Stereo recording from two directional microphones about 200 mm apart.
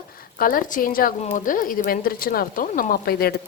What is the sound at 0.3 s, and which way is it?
A woman's voice, 45° left (ahead or behind).